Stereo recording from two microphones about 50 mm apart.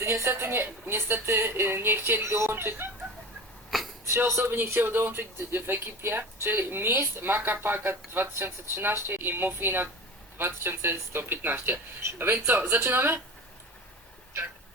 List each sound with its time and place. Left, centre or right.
0.0 s speech: right
2.2 s speech: right
3.7 s a sound: centre
4.3 s a man's voice: right
4.6 s speech: right